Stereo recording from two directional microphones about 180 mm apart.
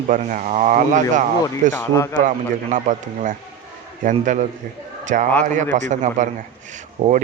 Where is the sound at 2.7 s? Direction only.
45° right (ahead or behind).